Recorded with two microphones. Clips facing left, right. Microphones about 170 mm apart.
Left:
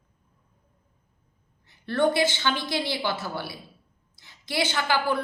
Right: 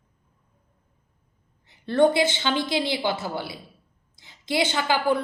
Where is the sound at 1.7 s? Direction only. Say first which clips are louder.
Right 4 dB; 20° right (ahead or behind).